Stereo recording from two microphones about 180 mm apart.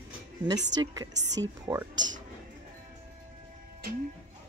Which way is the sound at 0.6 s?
80° right.